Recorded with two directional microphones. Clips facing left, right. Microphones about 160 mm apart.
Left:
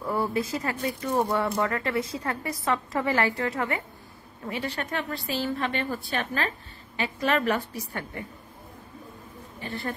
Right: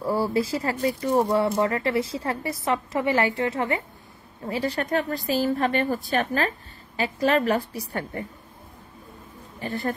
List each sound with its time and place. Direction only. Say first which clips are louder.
0.0 s speech: right 4 dB; 30° right (ahead or behind)
4.5 s a woman's voice: right 6 dB; 35° right (ahead or behind)
9.6 s speech: right 5 dB; 40° right (ahead or behind)